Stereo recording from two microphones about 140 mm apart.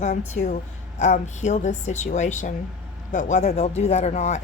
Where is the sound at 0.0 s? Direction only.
55° left (ahead or behind).